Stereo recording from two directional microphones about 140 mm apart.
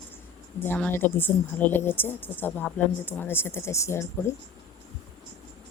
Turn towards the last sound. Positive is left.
turn(degrees=20)  # may be behind; listen again after turning